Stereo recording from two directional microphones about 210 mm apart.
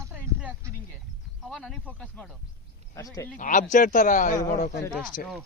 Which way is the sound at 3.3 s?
40° left (ahead or behind).